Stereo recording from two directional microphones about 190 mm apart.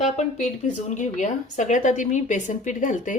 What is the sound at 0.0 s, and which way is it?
A woman's voice, 35° left (ahead or behind).